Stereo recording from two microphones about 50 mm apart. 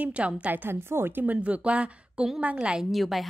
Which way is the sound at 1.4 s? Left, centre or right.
Right.